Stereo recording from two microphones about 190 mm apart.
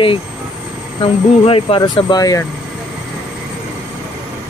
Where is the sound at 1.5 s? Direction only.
30° left (ahead or behind).